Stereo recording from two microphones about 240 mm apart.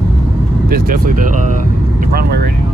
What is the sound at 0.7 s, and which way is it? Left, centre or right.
Vehicle, right.